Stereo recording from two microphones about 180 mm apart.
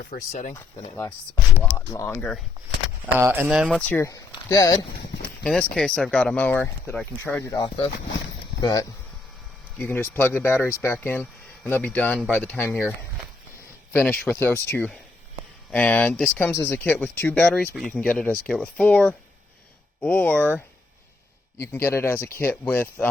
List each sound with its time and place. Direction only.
0.0 s speech: 50° left (ahead or behind)
1.7 s speech: 15° left (ahead or behind)
3.2 s speech: 15° right (ahead or behind)
3.8 s speech: 10° left (ahead or behind)
5.4 s speech: 5° left (ahead or behind)
13.9 s speech: 10° left (ahead or behind)